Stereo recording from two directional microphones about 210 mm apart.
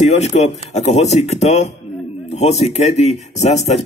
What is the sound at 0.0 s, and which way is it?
Speech, 30° left (ahead or behind).